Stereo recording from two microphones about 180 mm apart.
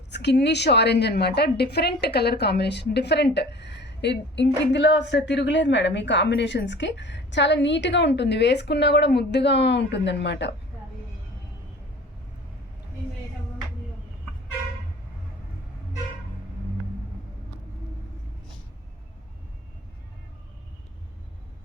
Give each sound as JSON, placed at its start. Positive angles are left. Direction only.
{"t": 0.1, "sound": "a woman's voice", "side_deg": 70}